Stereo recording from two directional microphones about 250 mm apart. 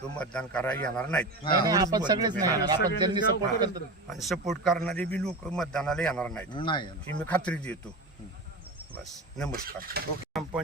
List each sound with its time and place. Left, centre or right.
0.2 s speech: centre
1.6 s speech: centre
4.0 s speech: centre
6.5 s speech: centre
7.2 s speech: centre
9.5 s speech: right
10.3 s a sound: centre